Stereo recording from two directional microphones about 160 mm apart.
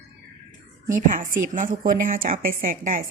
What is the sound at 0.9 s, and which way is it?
A woman's voice, 55° right (ahead or behind).